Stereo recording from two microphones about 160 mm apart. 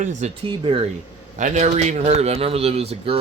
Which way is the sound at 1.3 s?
50° right (ahead or behind).